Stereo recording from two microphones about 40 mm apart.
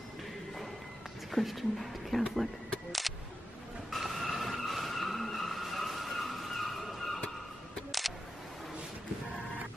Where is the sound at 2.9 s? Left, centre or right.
Centre.